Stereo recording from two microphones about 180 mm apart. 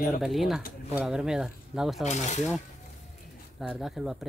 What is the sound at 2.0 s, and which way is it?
Speech, 40° left (ahead or behind).